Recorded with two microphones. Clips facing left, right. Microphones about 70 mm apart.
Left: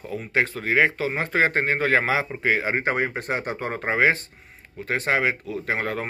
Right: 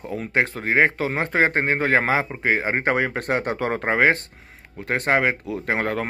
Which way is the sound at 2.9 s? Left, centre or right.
Right.